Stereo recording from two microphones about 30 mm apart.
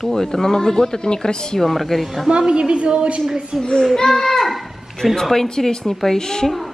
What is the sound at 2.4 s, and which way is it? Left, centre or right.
Speech, right.